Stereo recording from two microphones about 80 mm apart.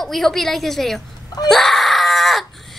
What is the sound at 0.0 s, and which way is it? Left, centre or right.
A woman's voice, centre.